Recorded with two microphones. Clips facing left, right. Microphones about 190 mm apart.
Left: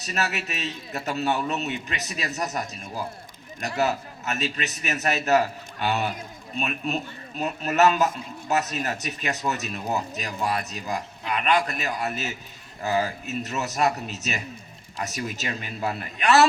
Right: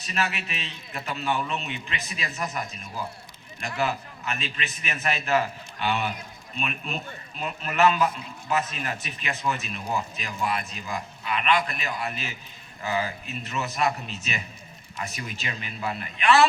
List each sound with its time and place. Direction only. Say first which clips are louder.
0.0 s a man's voice: left 1 dB; 40° left (ahead or behind)
3.8 s a man's voice: left 3 dB; 40° left (ahead or behind)